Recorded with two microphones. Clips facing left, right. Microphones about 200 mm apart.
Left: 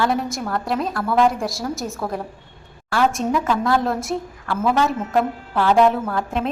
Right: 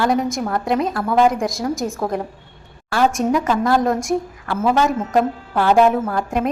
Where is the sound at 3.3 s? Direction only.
Centre (ahead or behind).